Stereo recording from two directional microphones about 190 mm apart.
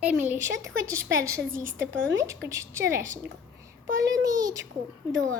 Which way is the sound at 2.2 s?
15° right (ahead or behind).